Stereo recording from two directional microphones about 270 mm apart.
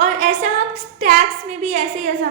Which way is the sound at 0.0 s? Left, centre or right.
Right.